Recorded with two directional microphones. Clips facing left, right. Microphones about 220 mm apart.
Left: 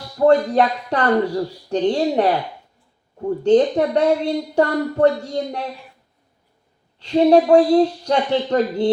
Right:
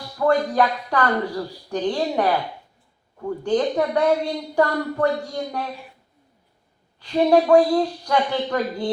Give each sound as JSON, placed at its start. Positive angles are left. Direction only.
{"t": 0.2, "sound": "a woman's voice", "side_deg": 25}
{"t": 7.0, "sound": "a woman's voice", "side_deg": 25}